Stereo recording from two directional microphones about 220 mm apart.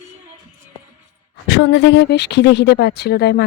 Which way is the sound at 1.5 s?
55° left (ahead or behind).